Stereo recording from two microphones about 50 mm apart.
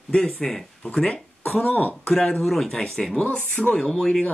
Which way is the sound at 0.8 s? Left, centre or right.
Centre.